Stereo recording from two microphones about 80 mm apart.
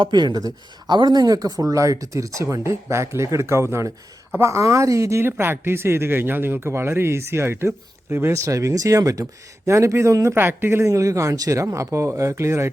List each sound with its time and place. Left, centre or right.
0.0 s speech: right